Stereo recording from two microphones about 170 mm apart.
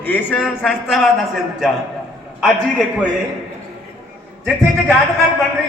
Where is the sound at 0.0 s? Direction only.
10° left (ahead or behind).